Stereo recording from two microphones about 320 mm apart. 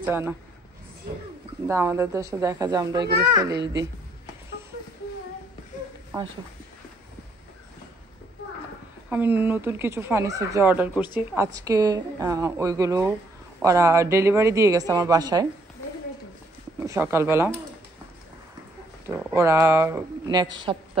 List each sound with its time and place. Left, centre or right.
0.0 s a man's voice: centre
1.7 s speech: centre
3.5 s a woman's voice: right
9.1 s speech: centre
16.8 s speech: centre
19.0 s a woman's voice: centre